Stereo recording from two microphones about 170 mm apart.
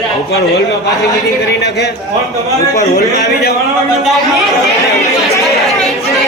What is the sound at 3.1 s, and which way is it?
Speech, 70° left (ahead or behind).